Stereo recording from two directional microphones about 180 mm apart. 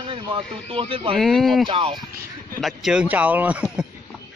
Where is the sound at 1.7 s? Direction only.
30° right (ahead or behind).